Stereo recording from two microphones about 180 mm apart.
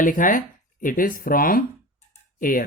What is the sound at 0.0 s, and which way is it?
Speech, 50° left (ahead or behind).